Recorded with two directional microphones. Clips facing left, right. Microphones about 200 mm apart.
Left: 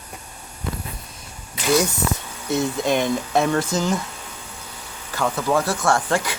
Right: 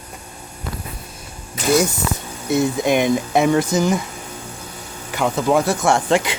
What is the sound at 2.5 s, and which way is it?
Speech, 10° right (ahead or behind).